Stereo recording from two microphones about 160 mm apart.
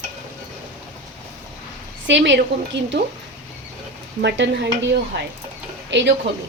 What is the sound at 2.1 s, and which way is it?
Speech, 90° right.